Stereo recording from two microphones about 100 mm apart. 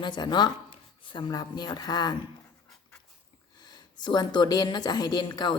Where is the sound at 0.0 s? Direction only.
45° left (ahead or behind).